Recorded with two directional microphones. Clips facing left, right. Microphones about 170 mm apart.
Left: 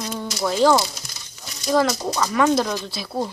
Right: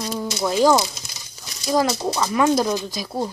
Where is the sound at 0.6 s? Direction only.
10° right (ahead or behind).